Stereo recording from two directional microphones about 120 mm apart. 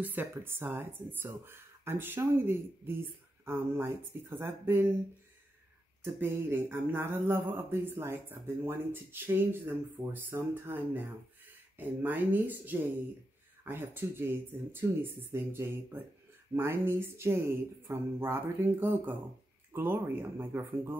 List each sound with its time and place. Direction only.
0.0 s speech: 15° right (ahead or behind)
6.1 s speech: 20° right (ahead or behind)